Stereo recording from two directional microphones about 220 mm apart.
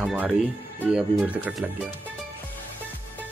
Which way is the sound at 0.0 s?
5° right (ahead or behind).